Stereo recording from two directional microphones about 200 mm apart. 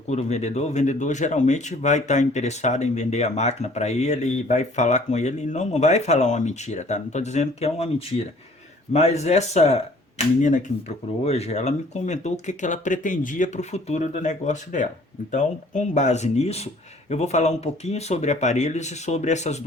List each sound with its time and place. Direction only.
0.1 s speech: 35° left (ahead or behind)